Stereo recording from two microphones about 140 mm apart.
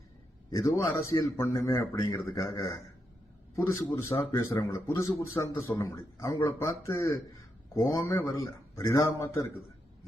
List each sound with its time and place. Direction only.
0.5 s a man's voice: 25° left (ahead or behind)